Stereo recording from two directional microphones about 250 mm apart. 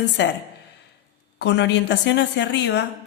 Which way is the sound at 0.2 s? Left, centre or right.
Left.